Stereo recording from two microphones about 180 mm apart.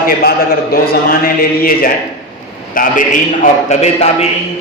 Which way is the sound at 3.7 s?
40° left (ahead or behind).